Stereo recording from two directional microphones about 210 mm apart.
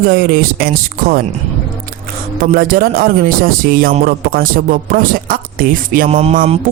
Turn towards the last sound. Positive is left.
turn(degrees=-30)  # may be behind; listen again after turning